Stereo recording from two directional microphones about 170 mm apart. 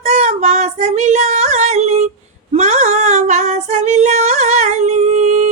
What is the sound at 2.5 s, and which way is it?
Female singing, 40° right (ahead or behind).